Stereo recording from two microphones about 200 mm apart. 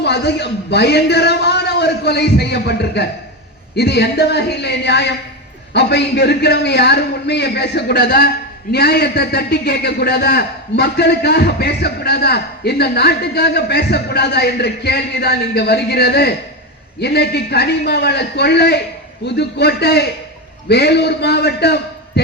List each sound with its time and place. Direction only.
0.0 s a man's voice: 55° left (ahead or behind)